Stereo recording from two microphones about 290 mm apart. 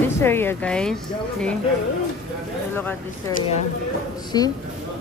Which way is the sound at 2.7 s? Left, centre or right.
Centre.